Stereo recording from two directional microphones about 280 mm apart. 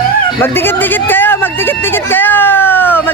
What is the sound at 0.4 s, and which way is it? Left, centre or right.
Speech, centre.